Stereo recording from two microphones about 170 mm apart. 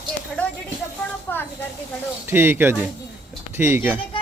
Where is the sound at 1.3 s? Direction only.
10° left (ahead or behind).